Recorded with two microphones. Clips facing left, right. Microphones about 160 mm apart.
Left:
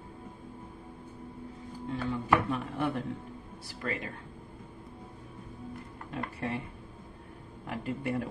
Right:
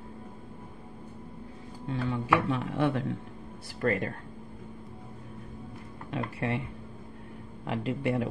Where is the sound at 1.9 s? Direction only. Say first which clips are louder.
Right 1 dB; 90° right.